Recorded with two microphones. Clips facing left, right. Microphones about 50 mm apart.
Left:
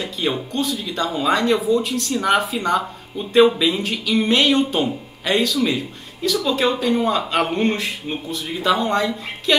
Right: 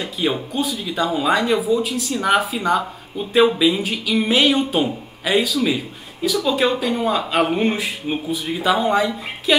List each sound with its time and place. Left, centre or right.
0.0 s speech: centre